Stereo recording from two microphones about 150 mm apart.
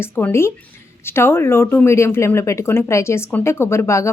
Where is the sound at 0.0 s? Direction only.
15° left (ahead or behind).